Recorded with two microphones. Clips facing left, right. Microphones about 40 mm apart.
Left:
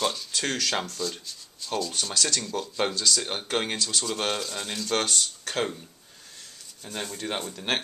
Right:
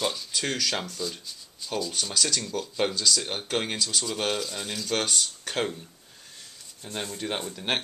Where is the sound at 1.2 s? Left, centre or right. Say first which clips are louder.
Even; centre.